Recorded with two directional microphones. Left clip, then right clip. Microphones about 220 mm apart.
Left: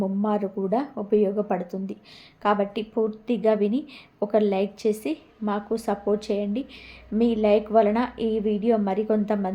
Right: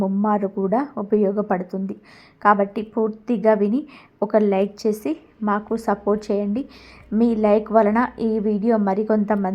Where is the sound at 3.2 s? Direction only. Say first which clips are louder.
Right 5 dB; 10° right (ahead or behind).